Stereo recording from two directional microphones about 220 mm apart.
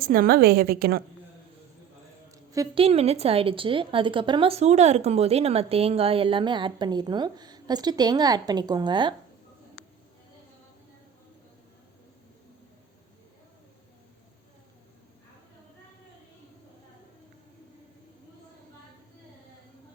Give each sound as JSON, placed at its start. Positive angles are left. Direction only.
{"t": 0.0, "sound": "a woman's voice", "side_deg": -40}
{"t": 2.3, "sound": "a sound", "side_deg": -15}
{"t": 2.8, "sound": "a woman's voice", "side_deg": -25}